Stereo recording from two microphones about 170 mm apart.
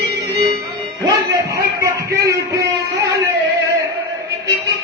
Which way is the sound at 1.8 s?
20° right (ahead or behind).